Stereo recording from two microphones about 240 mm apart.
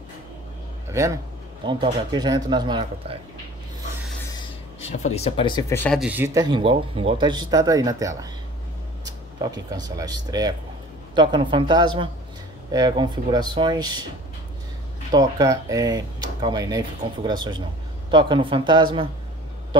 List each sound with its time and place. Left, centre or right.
0.9 s speech: centre
4.7 s speech: left; by 5.9 s centre
5.9 s speech: centre
15.1 s speech: centre